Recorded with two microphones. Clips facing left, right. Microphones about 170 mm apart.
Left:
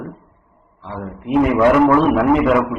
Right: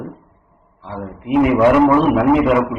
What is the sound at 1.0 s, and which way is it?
A man's voice, 15° right (ahead or behind).